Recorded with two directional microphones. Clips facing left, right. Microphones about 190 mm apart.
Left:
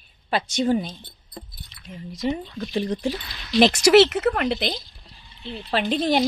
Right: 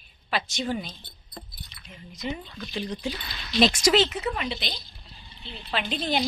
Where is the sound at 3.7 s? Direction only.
70° left (ahead or behind).